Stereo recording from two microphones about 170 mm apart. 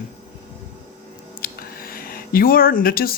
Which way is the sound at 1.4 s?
60° left (ahead or behind).